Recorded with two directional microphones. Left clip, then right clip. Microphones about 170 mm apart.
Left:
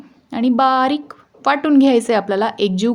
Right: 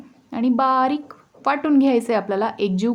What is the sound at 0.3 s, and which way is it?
A woman's voice, 25° left (ahead or behind).